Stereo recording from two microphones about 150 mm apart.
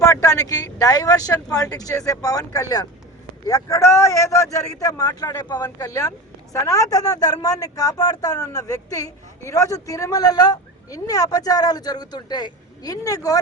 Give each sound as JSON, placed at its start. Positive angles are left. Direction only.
{"t": 0.0, "sound": "a woman's voice", "side_deg": 20}